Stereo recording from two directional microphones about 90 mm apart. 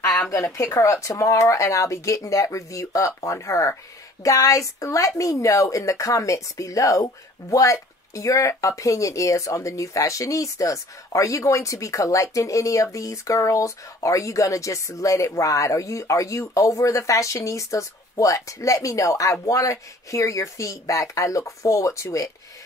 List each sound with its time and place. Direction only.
0.3 s speech: 35° left (ahead or behind)